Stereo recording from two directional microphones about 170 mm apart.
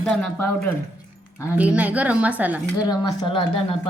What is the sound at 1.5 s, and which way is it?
A woman's voice, 10° right (ahead or behind).